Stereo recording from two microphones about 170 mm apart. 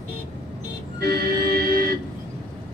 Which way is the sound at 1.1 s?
65° right (ahead or behind).